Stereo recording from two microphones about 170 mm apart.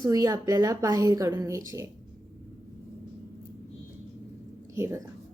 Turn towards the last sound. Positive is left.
turn(degrees=-15)  # may be behind; listen again after turning